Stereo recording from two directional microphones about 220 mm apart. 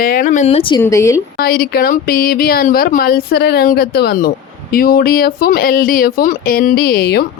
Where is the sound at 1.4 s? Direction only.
40° left (ahead or behind).